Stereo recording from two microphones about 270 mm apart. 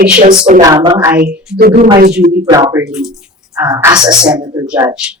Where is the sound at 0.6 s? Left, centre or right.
Centre.